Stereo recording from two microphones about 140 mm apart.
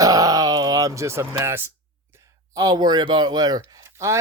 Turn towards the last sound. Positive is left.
turn(degrees=-20)  # may be behind; listen again after turning